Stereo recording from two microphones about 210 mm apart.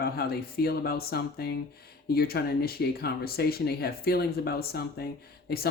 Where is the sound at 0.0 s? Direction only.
50° left (ahead or behind).